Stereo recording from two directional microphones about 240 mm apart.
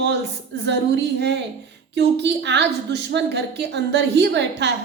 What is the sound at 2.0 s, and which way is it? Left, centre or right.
A woman's voice, right.